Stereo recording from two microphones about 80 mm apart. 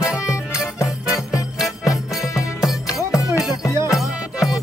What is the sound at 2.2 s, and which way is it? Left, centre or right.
Music, left.